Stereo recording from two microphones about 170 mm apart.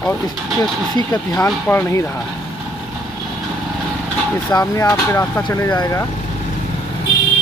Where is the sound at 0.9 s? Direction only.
20° left (ahead or behind).